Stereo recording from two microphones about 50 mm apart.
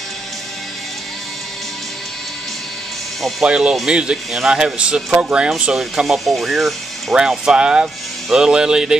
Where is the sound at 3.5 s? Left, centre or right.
Centre.